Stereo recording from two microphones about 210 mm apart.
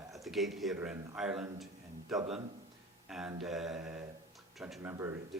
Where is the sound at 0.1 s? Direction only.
Centre (ahead or behind).